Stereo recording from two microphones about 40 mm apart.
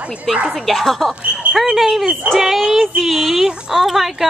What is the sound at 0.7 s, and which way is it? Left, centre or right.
A woman's voice, centre.